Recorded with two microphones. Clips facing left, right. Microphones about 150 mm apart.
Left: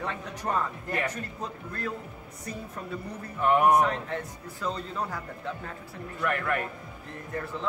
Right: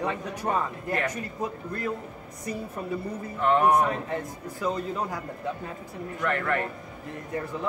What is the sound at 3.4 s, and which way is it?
Speech, 15° left (ahead or behind).